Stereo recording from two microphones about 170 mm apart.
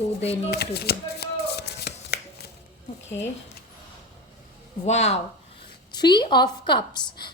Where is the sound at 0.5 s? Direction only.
70° left (ahead or behind).